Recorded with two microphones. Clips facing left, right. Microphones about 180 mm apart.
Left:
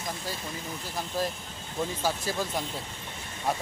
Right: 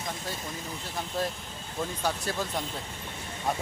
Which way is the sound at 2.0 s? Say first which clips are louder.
Even; centre (ahead or behind).